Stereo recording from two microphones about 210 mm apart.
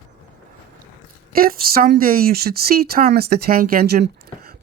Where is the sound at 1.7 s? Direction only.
45° right (ahead or behind).